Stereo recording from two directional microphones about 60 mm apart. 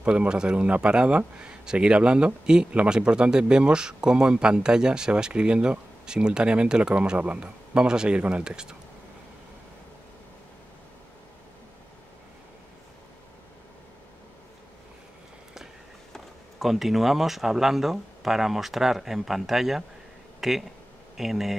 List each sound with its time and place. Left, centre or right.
0.0 s speech: centre
16.5 s speech: centre
20.3 s a sound: centre
21.2 s speech: centre